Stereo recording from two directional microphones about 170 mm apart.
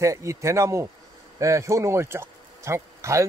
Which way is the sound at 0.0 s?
20° right (ahead or behind).